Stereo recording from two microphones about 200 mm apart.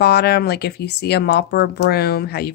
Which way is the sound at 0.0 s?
55° left (ahead or behind).